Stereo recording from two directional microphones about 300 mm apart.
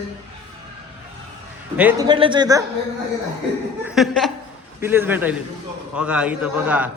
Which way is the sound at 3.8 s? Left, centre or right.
Centre.